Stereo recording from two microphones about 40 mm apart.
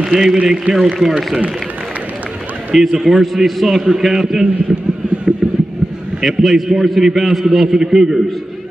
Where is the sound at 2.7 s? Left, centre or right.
Centre.